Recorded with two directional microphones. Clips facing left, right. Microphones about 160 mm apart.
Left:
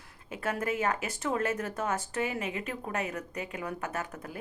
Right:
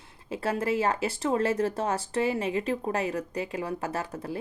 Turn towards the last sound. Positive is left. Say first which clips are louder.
# right 5 dB
turn(degrees=-30)  # may be behind; listen again after turning